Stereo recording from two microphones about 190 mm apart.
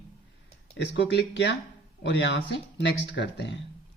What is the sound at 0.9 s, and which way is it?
Speech, 65° left (ahead or behind).